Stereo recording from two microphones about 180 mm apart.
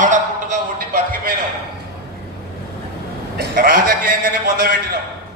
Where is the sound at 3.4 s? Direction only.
50° right (ahead or behind).